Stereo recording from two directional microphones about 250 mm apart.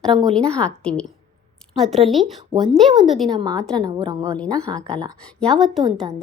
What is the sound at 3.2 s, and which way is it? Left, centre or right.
A woman's voice, centre.